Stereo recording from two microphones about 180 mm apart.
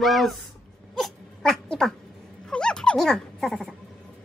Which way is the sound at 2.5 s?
5° left (ahead or behind).